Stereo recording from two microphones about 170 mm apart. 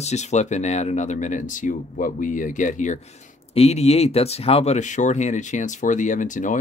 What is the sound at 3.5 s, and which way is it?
Speech, 35° left (ahead or behind).